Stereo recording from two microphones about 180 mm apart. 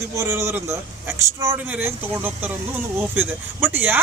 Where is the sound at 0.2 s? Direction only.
15° right (ahead or behind).